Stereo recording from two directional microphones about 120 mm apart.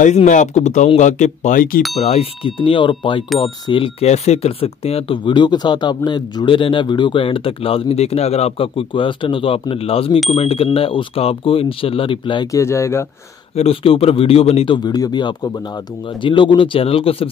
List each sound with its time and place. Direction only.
0.0 s speech: 85° left
2.4 s speech: 45° left (ahead or behind)
4.1 s speech: 60° left (ahead or behind); by 12.4 s 45° left (ahead or behind)
12.4 s speech: 25° left (ahead or behind)
13.6 s speech: 55° left (ahead or behind)
14.8 s speech: 35° left (ahead or behind); by 17.3 s 50° left (ahead or behind)